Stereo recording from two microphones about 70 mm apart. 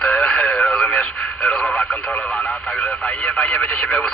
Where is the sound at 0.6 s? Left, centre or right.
Centre.